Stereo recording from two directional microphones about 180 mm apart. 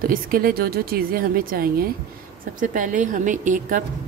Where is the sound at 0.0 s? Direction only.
55° right (ahead or behind).